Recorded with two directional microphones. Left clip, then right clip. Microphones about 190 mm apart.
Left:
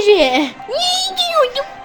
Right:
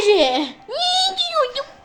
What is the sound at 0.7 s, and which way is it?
Speech, 30° left (ahead or behind).